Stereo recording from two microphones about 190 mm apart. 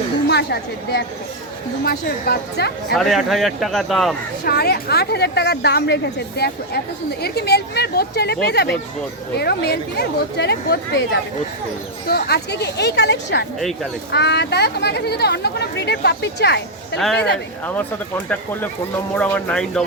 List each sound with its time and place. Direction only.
0.3 s a woman's voice: 60° left (ahead or behind)
2.9 s a man's voice: centre (ahead or behind)
4.4 s a woman's voice: 55° left (ahead or behind)
19.1 s speech: 10° left (ahead or behind)